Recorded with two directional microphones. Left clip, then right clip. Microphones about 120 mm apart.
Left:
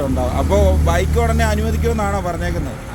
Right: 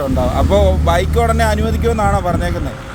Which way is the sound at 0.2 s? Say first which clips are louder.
Right 4 dB; 45° right (ahead or behind).